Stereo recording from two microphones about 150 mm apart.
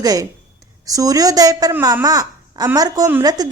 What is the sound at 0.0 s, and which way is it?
A woman's voice, 25° right (ahead or behind).